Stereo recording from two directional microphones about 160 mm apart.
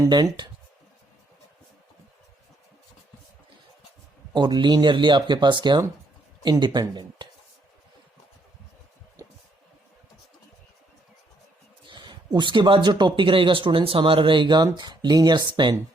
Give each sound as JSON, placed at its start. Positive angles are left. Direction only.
{"t": 0.0, "sound": "speech", "side_deg": -25}
{"t": 4.4, "sound": "speech", "side_deg": -30}
{"t": 11.9, "sound": "speech", "side_deg": -30}